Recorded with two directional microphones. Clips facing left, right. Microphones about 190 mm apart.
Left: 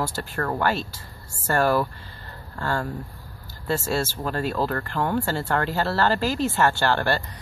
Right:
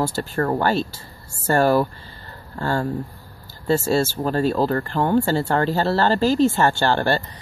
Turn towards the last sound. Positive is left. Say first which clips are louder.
# right 3 dB
turn(degrees=-30)  # may be behind; listen again after turning